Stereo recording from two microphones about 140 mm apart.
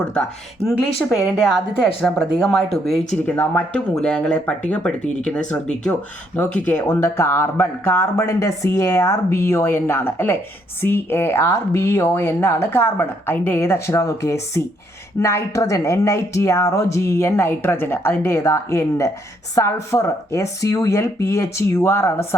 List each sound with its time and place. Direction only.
0.0 s speech: 10° left (ahead or behind)
1.4 s a woman's voice: 5° right (ahead or behind); by 22.4 s 20° left (ahead or behind)